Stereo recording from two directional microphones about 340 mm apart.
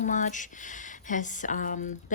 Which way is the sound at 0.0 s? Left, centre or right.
Left.